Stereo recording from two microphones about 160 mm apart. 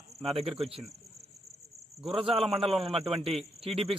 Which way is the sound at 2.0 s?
35° right (ahead or behind).